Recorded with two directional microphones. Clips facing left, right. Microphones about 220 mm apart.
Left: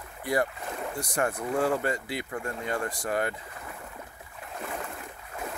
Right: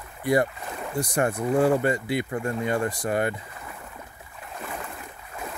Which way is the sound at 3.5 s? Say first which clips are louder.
Right 1 dB; 45° left (ahead or behind).